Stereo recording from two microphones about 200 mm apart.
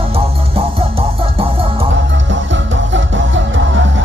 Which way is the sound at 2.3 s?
70° right (ahead or behind).